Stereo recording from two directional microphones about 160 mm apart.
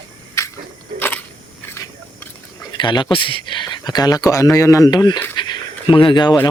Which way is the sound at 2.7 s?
30° left (ahead or behind).